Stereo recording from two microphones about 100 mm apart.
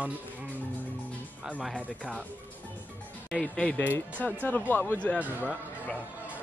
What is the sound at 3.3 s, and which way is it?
Speech, 10° left (ahead or behind).